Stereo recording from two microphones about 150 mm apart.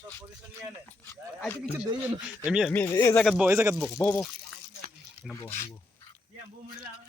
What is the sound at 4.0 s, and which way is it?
Speech, 15° left (ahead or behind).